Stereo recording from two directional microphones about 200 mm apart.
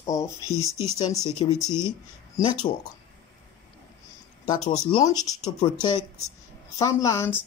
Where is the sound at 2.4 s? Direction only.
15° left (ahead or behind).